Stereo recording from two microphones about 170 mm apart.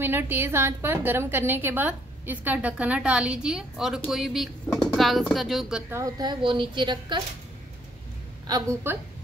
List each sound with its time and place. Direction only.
0.0 s a woman's voice: 10° right (ahead or behind)
5.9 s a woman's voice: 20° right (ahead or behind)
8.5 s a woman's voice: 20° right (ahead or behind)